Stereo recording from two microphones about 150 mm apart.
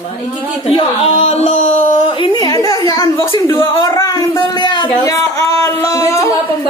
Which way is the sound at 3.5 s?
35° left (ahead or behind).